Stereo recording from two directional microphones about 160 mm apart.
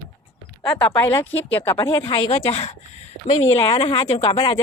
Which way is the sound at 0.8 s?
25° left (ahead or behind).